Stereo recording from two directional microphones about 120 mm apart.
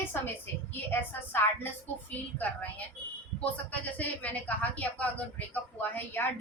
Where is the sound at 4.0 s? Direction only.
15° left (ahead or behind).